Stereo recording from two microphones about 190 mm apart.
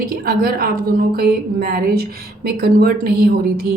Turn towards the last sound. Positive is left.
turn(degrees=-55)  # may be behind; listen again after turning